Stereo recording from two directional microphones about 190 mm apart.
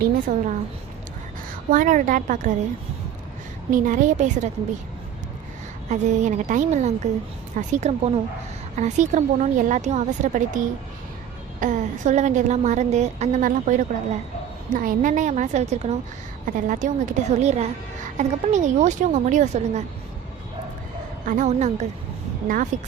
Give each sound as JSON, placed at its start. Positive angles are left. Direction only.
{"t": 0.0, "sound": "a woman's voice", "side_deg": -40}
{"t": 1.7, "sound": "a woman's voice", "side_deg": -45}
{"t": 3.7, "sound": "a woman's voice", "side_deg": -45}
{"t": 5.9, "sound": "a woman's voice", "side_deg": -40}
{"t": 11.6, "sound": "a woman's voice", "side_deg": -40}
{"t": 21.2, "sound": "a woman's voice", "side_deg": -40}